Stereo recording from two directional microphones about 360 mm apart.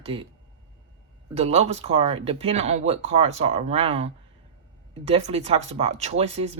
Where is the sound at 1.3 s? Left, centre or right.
Centre.